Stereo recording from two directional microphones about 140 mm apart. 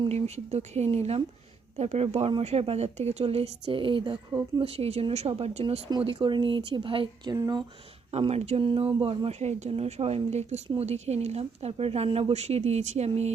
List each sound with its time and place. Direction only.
0.1 s speech: 50° right (ahead or behind); by 4.2 s 35° right (ahead or behind)
4.3 s speech: 20° right (ahead or behind)
4.6 s speech: 45° right (ahead or behind)
6.0 s speech: 40° right (ahead or behind)
8.1 s speech: 50° right (ahead or behind)